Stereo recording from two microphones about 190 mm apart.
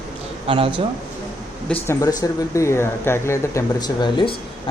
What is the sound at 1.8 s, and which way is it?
Speech, 15° left (ahead or behind).